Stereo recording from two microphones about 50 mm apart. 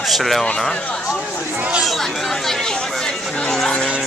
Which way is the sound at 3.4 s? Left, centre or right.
Centre.